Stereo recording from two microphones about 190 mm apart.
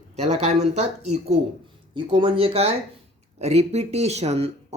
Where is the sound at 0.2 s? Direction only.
35° right (ahead or behind).